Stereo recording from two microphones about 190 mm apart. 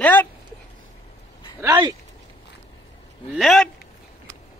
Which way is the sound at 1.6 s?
20° right (ahead or behind).